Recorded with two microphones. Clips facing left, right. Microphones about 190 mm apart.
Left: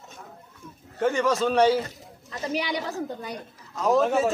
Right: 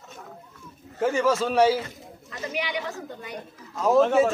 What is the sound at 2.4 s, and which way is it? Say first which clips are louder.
Speech: left 2 dB; 35° left (ahead or behind).